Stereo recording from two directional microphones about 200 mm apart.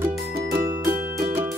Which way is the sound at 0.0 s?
10° right (ahead or behind).